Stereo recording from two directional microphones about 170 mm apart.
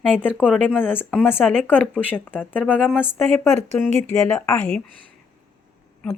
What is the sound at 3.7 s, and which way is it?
Speech, 10° left (ahead or behind).